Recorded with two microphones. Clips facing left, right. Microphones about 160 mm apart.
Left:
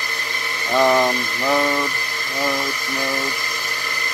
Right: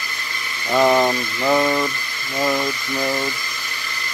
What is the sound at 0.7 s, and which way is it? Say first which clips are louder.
Speech: right 1 dB; 15° right (ahead or behind).